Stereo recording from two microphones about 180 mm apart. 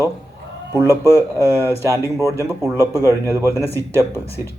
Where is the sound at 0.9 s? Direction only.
20° right (ahead or behind).